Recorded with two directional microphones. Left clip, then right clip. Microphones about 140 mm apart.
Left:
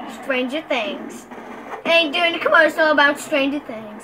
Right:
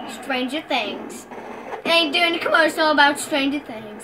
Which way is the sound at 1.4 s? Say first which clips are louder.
Right 1 dB; 25° left (ahead or behind).